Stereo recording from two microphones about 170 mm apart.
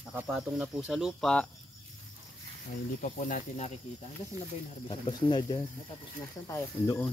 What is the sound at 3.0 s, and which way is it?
Speech, 50° left (ahead or behind).